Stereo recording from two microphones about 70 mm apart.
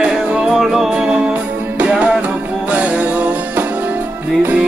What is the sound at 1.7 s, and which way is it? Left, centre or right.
Music, centre.